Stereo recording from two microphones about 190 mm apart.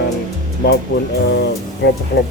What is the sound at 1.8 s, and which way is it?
Speech, 65° left (ahead or behind).